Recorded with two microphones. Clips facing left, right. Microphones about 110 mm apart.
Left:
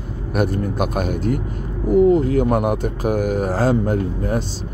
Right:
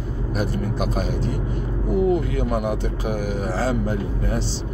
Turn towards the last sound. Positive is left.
turn(degrees=45)  # may be behind; listen again after turning